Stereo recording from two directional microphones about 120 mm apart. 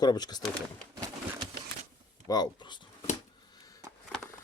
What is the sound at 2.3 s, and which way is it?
Speech, 35° left (ahead or behind).